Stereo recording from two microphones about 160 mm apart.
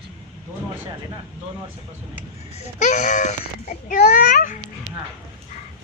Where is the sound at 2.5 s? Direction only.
50° left (ahead or behind).